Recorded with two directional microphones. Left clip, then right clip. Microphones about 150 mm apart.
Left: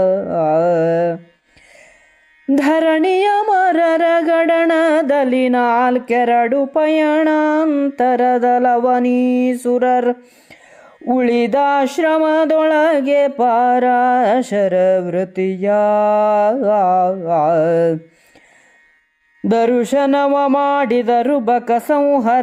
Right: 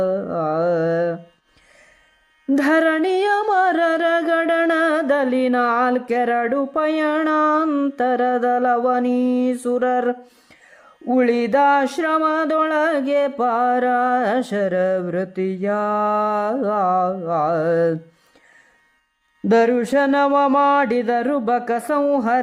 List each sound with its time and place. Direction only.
0.0 s carnatic music: 20° left (ahead or behind)
2.5 s music: 25° left (ahead or behind)
11.0 s mantra: 30° left (ahead or behind)
19.5 s mantra: 30° left (ahead or behind)